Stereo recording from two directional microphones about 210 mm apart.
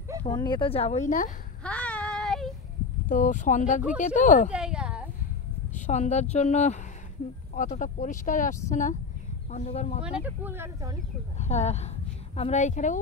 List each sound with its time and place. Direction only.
0.3 s speech: 20° left (ahead or behind); by 1.3 s 35° left (ahead or behind)
1.6 s child singing: 5° left (ahead or behind)
3.1 s speech: 35° left (ahead or behind)
4.5 s a sound: 5° right (ahead or behind)
5.8 s speech: 35° left (ahead or behind)
10.0 s speech: 10° right (ahead or behind)
11.3 s speech: 30° left (ahead or behind)